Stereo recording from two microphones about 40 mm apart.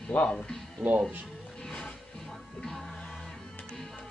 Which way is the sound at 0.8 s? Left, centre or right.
Right.